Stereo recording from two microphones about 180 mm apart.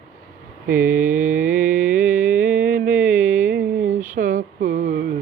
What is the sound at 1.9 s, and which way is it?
Music, 50° right (ahead or behind).